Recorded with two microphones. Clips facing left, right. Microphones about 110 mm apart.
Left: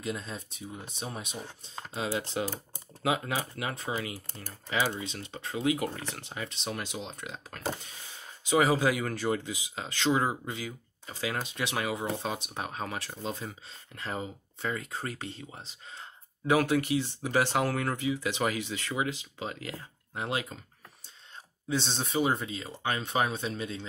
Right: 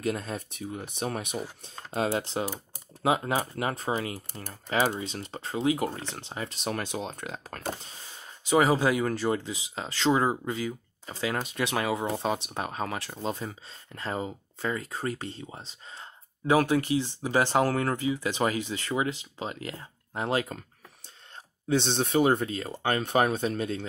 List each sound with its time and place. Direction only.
0.0 s speech: 50° right (ahead or behind)
2.0 s speech: 50° right (ahead or behind)
3.0 s speech: 35° right (ahead or behind)
21.6 s speech: 60° right (ahead or behind)